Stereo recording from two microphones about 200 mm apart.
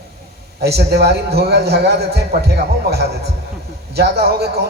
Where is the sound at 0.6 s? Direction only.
55° right (ahead or behind).